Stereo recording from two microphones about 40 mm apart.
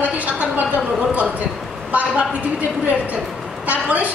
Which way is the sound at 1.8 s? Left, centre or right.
Right.